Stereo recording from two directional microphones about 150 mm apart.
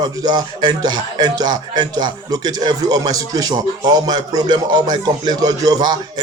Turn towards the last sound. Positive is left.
turn(degrees=-25)  # may be behind; listen again after turning